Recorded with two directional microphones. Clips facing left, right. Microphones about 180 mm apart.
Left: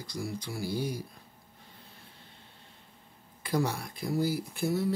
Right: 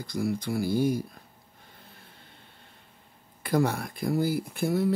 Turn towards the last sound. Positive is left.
turn(degrees=-55)  # may be behind; listen again after turning